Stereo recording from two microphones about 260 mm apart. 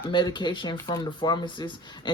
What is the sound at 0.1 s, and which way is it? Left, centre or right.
Speech, centre.